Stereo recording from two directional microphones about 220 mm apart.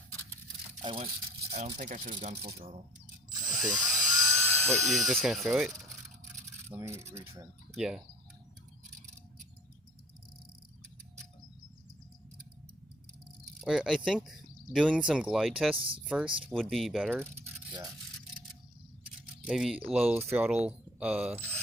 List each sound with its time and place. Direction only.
0.8 s a sound: 25° right (ahead or behind)
1.8 s speech: 35° right (ahead or behind)
3.5 s dental drill: centre (ahead or behind)
4.9 s speech: centre (ahead or behind)
7.7 s speech: centre (ahead or behind)
13.6 s speech: centre (ahead or behind)
15.7 s speech: 25° right (ahead or behind)
16.0 s speech: 5° right (ahead or behind)
19.5 s speech: 5° right (ahead or behind)